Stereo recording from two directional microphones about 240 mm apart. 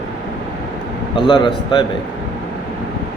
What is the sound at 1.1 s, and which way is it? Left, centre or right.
Speech, centre.